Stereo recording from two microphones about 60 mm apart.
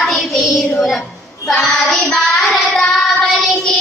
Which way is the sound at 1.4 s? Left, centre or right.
Centre.